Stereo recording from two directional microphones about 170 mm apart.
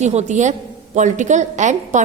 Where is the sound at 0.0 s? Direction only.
40° right (ahead or behind).